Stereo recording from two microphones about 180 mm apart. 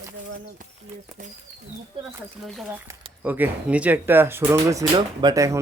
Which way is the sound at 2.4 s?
Centre (ahead or behind).